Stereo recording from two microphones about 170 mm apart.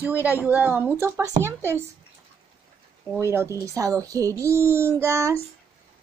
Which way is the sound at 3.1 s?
15° right (ahead or behind).